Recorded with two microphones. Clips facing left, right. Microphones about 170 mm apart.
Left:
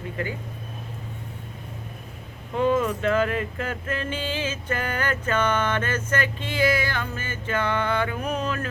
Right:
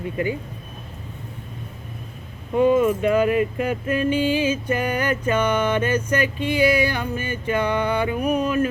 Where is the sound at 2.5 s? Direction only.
15° right (ahead or behind).